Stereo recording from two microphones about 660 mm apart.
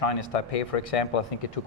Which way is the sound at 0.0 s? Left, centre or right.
Left.